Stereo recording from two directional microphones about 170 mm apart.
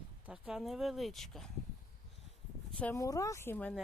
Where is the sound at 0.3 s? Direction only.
5° right (ahead or behind).